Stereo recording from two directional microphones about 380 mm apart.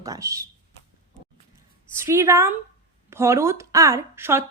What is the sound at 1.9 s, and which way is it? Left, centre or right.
A woman's voice, centre.